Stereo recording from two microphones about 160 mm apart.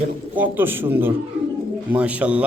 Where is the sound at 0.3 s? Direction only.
10° right (ahead or behind).